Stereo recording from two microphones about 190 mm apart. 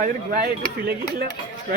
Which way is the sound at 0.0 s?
55° right (ahead or behind).